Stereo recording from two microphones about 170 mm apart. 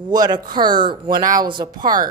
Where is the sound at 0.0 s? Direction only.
25° right (ahead or behind).